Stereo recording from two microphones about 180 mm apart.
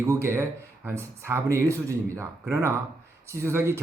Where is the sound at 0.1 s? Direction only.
15° right (ahead or behind).